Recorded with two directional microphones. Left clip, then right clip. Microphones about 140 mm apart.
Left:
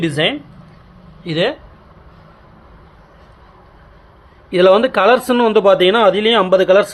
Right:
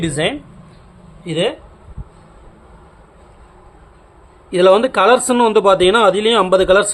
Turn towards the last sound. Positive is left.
turn(degrees=-10)  # may be behind; listen again after turning